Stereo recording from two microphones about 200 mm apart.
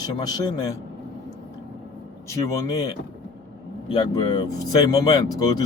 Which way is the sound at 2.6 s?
15° left (ahead or behind).